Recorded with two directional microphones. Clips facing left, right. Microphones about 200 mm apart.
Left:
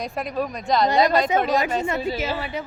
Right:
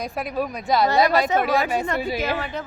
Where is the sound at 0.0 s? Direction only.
Centre (ahead or behind).